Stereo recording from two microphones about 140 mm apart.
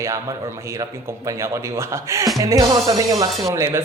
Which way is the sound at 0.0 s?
20° right (ahead or behind).